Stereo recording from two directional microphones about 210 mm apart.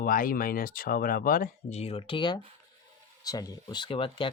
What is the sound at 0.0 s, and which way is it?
Speech, 40° left (ahead or behind).